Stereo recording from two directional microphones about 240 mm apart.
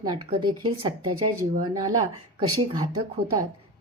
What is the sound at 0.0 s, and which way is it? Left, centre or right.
Speech, centre.